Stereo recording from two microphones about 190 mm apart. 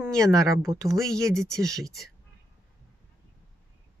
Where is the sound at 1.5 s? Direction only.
Centre (ahead or behind).